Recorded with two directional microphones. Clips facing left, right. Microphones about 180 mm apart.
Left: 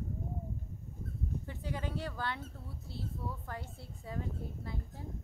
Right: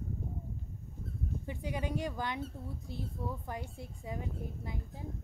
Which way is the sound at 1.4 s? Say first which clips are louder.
Right 6 dB; 15° right (ahead or behind).